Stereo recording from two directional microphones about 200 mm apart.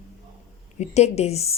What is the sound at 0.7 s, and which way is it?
Speech, 35° left (ahead or behind).